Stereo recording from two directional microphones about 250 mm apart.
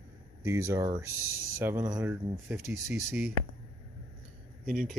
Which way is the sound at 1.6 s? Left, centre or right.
Centre.